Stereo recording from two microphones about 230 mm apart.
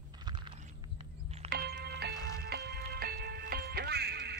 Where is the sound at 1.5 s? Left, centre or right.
Right.